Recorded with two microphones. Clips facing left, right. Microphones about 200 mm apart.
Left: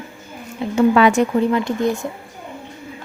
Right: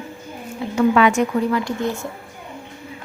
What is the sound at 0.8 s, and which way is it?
Speech, 35° left (ahead or behind).